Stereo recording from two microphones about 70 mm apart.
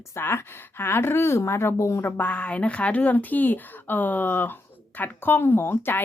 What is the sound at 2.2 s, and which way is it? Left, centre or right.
A woman's voice, centre.